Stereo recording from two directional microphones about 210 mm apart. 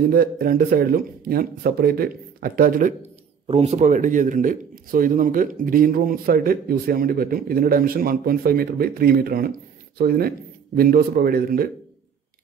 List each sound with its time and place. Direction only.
0.1 s speech: 45° right (ahead or behind)
3.4 s speech: 30° right (ahead or behind)